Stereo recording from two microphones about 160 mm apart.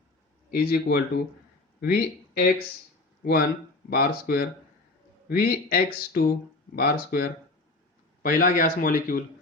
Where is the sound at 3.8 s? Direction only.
75° left (ahead or behind); by 9.2 s 60° left (ahead or behind).